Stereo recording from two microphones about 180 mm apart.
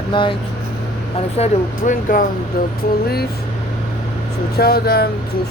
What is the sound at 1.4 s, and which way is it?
Speech, 35° left (ahead or behind).